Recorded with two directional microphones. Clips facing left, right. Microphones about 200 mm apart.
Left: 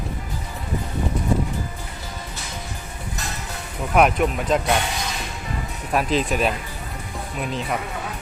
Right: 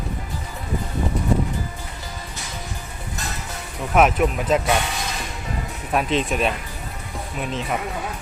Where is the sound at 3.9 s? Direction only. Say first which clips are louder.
Even; centre (ahead or behind).